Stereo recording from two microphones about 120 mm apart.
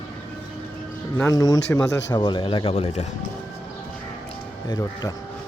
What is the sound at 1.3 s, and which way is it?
Speech, 30° left (ahead or behind).